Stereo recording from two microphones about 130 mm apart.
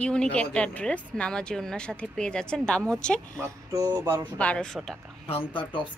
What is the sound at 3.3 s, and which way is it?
Speech, 25° right (ahead or behind).